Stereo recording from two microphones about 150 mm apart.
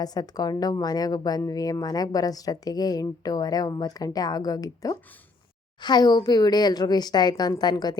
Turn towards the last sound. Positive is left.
turn(degrees=25)  # may be behind; listen again after turning